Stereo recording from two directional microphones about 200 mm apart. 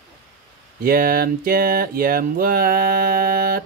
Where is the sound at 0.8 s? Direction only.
45° right (ahead or behind).